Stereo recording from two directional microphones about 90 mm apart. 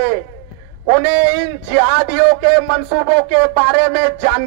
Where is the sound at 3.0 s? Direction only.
25° right (ahead or behind).